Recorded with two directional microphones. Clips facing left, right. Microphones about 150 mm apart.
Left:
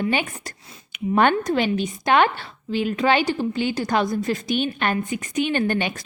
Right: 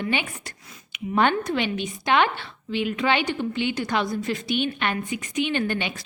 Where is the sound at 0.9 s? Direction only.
50° left (ahead or behind).